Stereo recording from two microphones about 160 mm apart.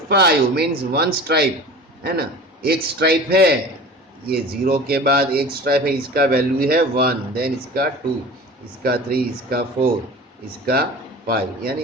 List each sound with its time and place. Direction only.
0.1 s a man's voice: 85° right
4.3 s speech: 65° right (ahead or behind)
11.3 s speech: 70° right (ahead or behind)